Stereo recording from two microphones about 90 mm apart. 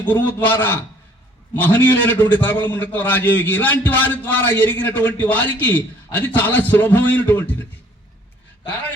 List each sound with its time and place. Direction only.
0.0 s a man's voice: 20° left (ahead or behind)